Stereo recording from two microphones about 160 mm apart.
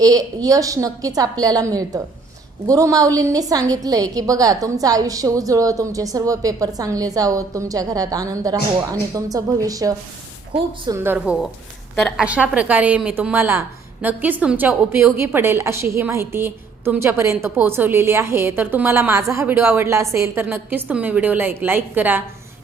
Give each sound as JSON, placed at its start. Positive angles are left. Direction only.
{"t": 0.0, "sound": "a woman's voice", "side_deg": -20}
{"t": 10.9, "sound": "a woman's voice", "side_deg": -15}
{"t": 11.9, "sound": "a woman's voice", "side_deg": 5}
{"t": 12.2, "sound": "a woman's voice", "side_deg": -10}